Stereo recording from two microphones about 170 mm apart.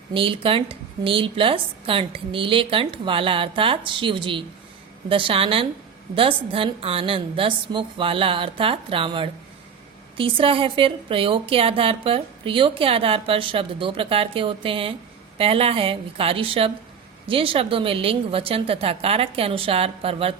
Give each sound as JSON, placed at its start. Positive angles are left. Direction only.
{"t": 0.1, "sound": "a woman's voice", "side_deg": -30}